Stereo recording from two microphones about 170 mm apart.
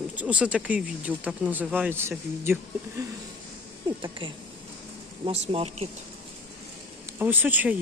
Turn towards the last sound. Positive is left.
turn(degrees=-10)  # may be behind; listen again after turning